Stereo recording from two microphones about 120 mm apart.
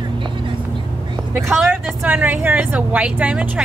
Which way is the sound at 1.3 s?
Centre (ahead or behind).